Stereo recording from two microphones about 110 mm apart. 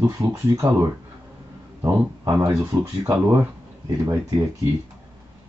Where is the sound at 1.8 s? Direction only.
25° right (ahead or behind).